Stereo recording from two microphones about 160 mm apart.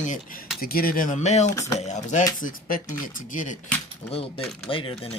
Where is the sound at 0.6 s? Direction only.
65° left (ahead or behind); by 1.5 s 45° left (ahead or behind).